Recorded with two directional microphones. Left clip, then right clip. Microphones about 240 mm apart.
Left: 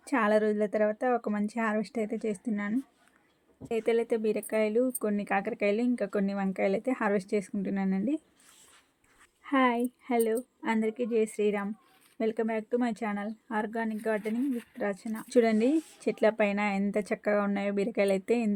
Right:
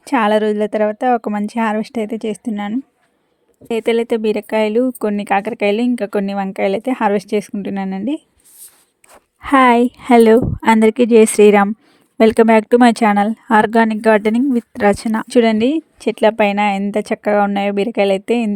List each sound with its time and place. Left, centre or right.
0.0 s a woman's voice: right
9.4 s a woman's voice: right